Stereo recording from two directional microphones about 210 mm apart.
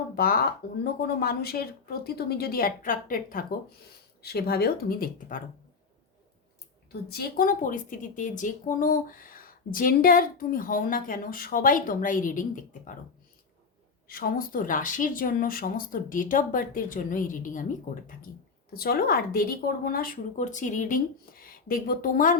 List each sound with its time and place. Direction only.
0.2 s speech: 45° left (ahead or behind)
7.1 s a woman's voice: 45° left (ahead or behind)
14.1 s a woman's voice: 45° left (ahead or behind)